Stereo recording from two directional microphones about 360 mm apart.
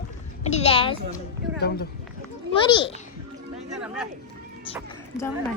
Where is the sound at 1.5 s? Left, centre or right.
Left.